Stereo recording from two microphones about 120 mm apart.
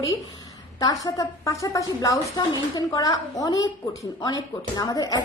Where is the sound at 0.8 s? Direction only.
30° left (ahead or behind).